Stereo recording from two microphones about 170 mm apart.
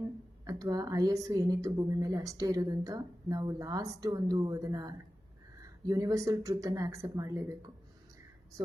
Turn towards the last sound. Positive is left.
turn(degrees=-20)  # may be behind; listen again after turning